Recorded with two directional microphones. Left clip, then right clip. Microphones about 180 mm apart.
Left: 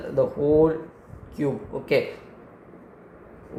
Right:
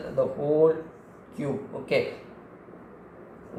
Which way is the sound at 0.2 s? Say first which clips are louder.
Left 3 dB; 50° left (ahead or behind).